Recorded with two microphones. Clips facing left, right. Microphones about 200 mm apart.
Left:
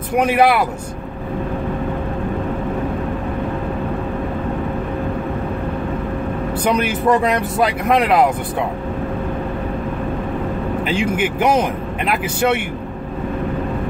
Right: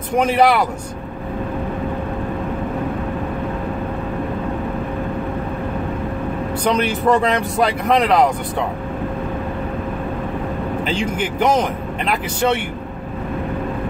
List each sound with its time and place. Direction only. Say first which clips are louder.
0.1 s speech: even; 10° left (ahead or behind)
6.6 s speech: even; 5° left (ahead or behind)
10.9 s speech: left 4 dB; 5° left (ahead or behind)